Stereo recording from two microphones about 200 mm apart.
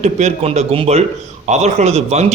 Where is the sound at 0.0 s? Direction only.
35° right (ahead or behind).